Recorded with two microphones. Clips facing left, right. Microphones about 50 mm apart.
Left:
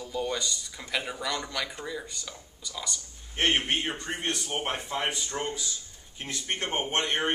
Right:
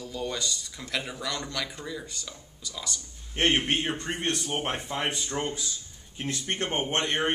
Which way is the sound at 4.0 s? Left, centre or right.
Right.